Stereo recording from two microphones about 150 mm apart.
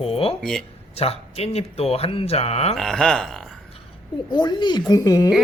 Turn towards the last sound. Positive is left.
turn(degrees=25)  # may be behind; listen again after turning